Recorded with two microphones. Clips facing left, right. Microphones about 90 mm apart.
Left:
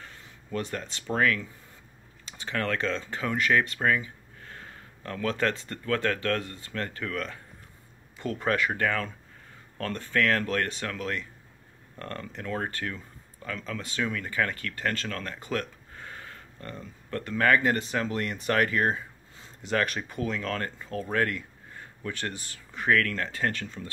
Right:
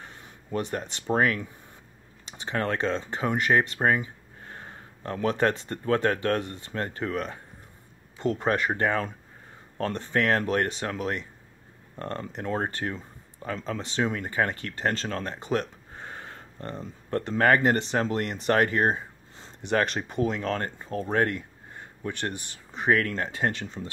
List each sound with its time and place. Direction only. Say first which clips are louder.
0.0 s speech: right 2 dB; 25° right (ahead or behind)